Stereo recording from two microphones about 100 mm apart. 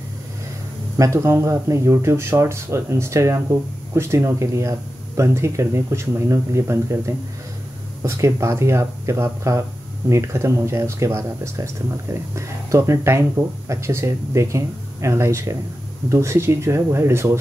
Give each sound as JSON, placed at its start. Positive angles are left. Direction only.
{"t": 0.9, "sound": "speech", "side_deg": -30}